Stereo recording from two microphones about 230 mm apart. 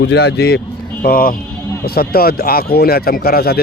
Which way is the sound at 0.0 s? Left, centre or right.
Left.